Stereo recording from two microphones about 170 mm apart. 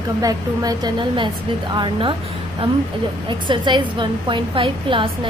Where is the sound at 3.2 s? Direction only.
30° right (ahead or behind).